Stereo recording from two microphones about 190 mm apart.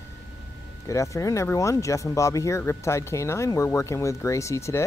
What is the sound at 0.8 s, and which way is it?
Speech, 15° left (ahead or behind).